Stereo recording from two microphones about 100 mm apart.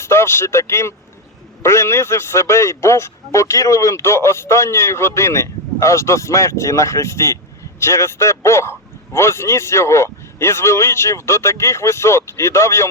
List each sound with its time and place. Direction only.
0.0 s speech: 25° left (ahead or behind)